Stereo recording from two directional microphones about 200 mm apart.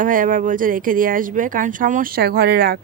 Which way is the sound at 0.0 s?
40° right (ahead or behind).